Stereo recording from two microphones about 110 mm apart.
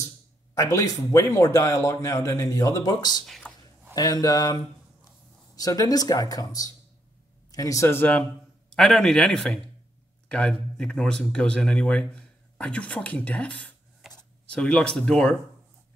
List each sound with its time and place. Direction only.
0.6 s a man's voice: 30° left (ahead or behind)
3.3 s a sound: centre (ahead or behind)
3.9 s a man's voice: 35° left (ahead or behind)
5.6 s a man's voice: 35° left (ahead or behind); by 8.3 s 15° left (ahead or behind)
8.7 s a man's voice: 5° left (ahead or behind)
14.0 s a sound: 5° right (ahead or behind)
14.5 s a man's voice: 10° left (ahead or behind)